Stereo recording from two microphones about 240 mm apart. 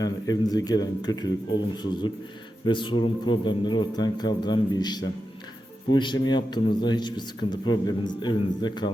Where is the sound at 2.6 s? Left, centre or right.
Centre.